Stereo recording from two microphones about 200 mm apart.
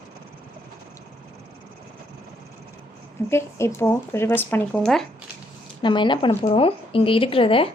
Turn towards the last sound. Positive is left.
turn(degrees=25)  # may be behind; listen again after turning